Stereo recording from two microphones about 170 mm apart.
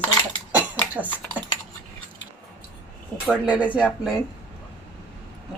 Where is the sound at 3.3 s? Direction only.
10° right (ahead or behind).